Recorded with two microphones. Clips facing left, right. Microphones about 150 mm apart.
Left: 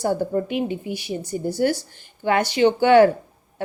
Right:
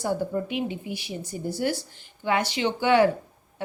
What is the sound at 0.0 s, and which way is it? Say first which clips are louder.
A woman's voice: left 5 dB; 50° left (ahead or behind).